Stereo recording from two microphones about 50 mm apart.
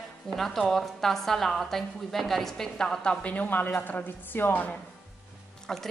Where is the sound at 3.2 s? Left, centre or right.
Left.